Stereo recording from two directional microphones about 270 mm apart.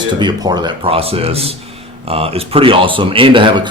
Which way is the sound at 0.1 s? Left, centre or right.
Centre.